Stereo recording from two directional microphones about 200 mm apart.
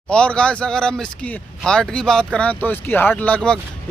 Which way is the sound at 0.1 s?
5° left (ahead or behind).